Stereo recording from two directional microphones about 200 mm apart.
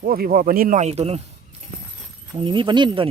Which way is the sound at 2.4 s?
25° right (ahead or behind).